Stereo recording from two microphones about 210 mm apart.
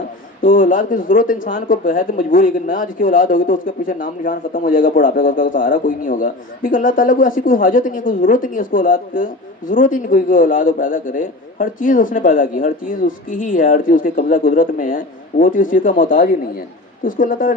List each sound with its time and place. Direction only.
0.4 s speech: 40° left (ahead or behind)